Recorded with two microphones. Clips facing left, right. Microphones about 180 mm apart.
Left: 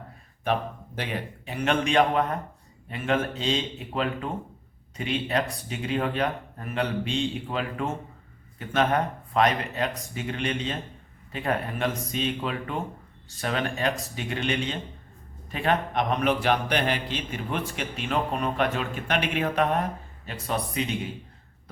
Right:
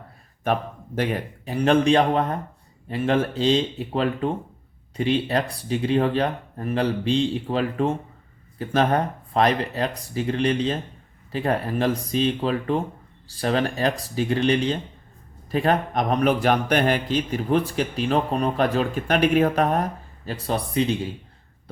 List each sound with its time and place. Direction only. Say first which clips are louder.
0.9 s a man's voice: right 8 dB; 40° right (ahead or behind)